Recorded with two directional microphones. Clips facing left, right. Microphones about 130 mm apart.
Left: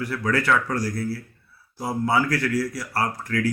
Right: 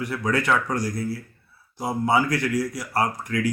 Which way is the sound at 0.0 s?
20° right (ahead or behind).